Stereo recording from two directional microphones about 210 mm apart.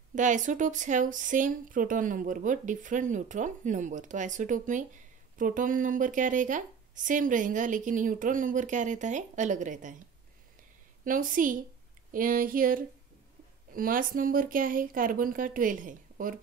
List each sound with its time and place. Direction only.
0.1 s speech: 35° right (ahead or behind)
11.1 s speech: 40° right (ahead or behind)